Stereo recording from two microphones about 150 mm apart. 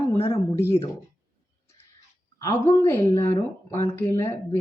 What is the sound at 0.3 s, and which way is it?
Speech, 20° left (ahead or behind).